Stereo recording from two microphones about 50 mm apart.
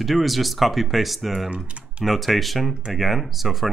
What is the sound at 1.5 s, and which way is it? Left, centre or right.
Speech, right.